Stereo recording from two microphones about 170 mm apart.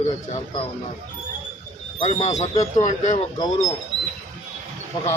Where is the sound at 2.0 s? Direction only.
45° left (ahead or behind).